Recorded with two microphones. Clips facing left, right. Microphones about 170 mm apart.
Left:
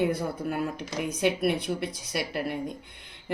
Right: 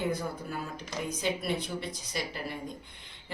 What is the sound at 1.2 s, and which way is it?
Speech, 65° left (ahead or behind).